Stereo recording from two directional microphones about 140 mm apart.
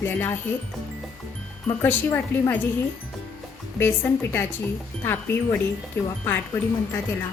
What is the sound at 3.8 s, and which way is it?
A woman's voice, 15° left (ahead or behind).